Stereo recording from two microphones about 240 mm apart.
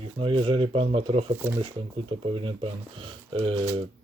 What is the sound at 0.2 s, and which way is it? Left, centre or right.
Speech, right.